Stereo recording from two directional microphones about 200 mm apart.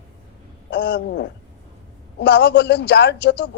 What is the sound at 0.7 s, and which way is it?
A woman's voice, 60° left (ahead or behind).